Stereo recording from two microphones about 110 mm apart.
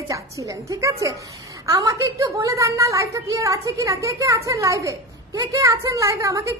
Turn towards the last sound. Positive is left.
turn(degrees=-25)  # may be behind; listen again after turning